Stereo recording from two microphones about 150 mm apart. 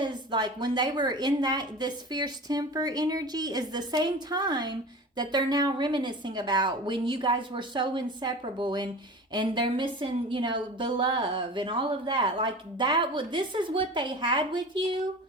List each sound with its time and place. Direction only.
0.0 s a woman's voice: 30° right (ahead or behind)